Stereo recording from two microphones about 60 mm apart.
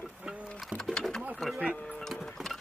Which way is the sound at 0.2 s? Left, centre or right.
Centre.